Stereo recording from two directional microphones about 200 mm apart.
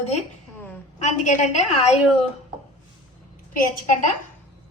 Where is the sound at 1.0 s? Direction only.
35° left (ahead or behind).